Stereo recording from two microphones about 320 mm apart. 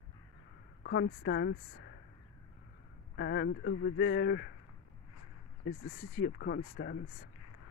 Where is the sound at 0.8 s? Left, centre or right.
Left.